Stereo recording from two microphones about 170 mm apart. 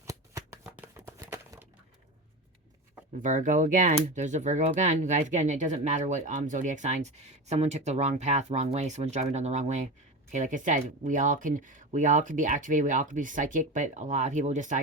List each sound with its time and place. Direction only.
0.0 s shuffling cards: 20° right (ahead or behind)
3.2 s speech: 50° right (ahead or behind)